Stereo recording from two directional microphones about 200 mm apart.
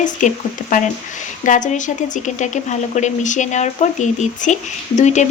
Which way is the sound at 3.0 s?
35° left (ahead or behind).